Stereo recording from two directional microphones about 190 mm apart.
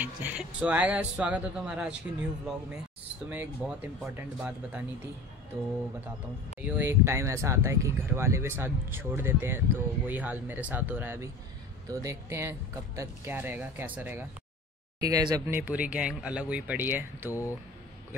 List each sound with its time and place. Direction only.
0.0 s speech: 10° right (ahead or behind)
3.3 s speech: 10° right (ahead or behind)
6.6 s speech: 10° right (ahead or behind)
17.3 s speech: 15° left (ahead or behind)